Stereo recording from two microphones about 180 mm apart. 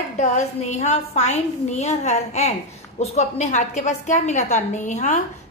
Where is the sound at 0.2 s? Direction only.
40° left (ahead or behind).